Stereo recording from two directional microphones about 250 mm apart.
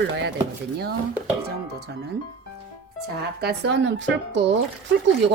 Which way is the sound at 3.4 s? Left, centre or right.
Right.